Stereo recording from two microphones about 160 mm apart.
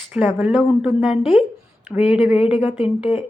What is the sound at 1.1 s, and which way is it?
Speech, 35° left (ahead or behind).